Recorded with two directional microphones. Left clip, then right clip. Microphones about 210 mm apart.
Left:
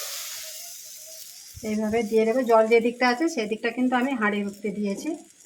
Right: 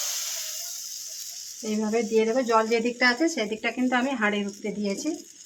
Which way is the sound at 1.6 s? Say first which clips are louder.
Left 1 dB; centre (ahead or behind).